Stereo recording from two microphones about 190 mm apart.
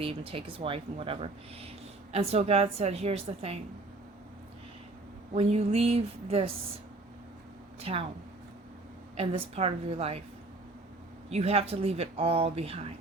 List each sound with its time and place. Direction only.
0.0 s speech: 30° right (ahead or behind)
5.3 s speech: 35° right (ahead or behind)
7.8 s speech: 30° right (ahead or behind)
9.1 s speech: 30° right (ahead or behind)
11.3 s speech: 35° right (ahead or behind)